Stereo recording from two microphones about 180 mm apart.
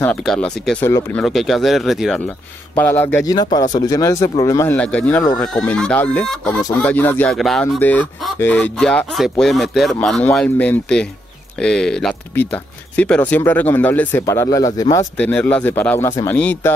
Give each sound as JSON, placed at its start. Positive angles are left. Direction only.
{"t": 0.0, "sound": "speech", "side_deg": 5}
{"t": 1.2, "sound": "a man's voice", "side_deg": 0}
{"t": 15.1, "sound": "speech", "side_deg": 10}